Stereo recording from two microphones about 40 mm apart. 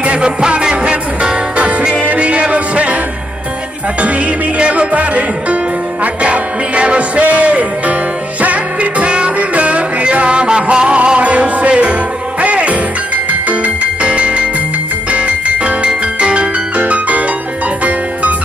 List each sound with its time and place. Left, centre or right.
0.0 s music: right
0.4 s music: right
4.6 s music: right
9.0 s music: right
14.0 s music: right